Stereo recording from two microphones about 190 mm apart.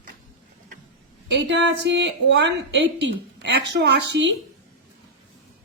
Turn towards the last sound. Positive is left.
turn(degrees=-65)  # may be behind; listen again after turning